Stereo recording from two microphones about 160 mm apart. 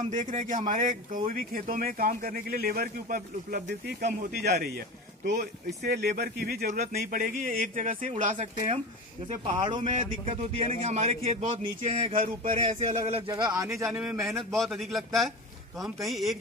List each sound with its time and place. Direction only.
0.1 s speech: 50° right (ahead or behind)
4.4 s speech: 85° right
5.8 s speech: 90° right; by 6.7 s 70° right (ahead or behind)
6.7 s speech: 50° right (ahead or behind)
8.4 s a man's voice: 35° right (ahead or behind)
9.8 s a man's voice: 45° right (ahead or behind)
13.3 s speech: 20° right (ahead or behind)
14.2 s a man's voice: centre (ahead or behind)